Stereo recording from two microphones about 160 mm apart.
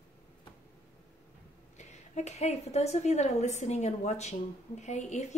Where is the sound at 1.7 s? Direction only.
45° left (ahead or behind).